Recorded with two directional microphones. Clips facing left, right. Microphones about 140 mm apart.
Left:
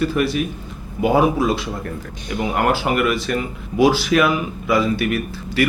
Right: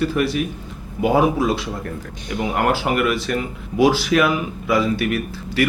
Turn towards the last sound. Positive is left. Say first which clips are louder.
# left 1 dB
turn(degrees=10)  # may be behind; listen again after turning